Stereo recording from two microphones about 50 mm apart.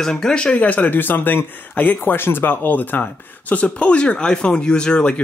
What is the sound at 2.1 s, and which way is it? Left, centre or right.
Speech, left.